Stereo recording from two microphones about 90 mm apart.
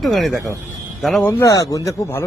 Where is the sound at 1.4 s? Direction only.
40° left (ahead or behind).